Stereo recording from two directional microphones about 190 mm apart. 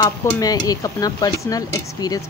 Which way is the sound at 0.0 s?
15° left (ahead or behind).